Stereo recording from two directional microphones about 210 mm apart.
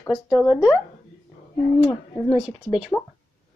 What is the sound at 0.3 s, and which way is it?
Speech, 5° left (ahead or behind).